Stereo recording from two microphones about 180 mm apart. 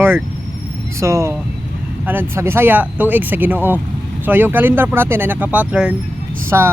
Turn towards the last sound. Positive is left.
turn(degrees=-15)  # may be behind; listen again after turning